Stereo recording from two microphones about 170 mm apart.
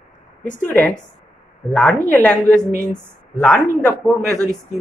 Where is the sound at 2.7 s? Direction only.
15° right (ahead or behind).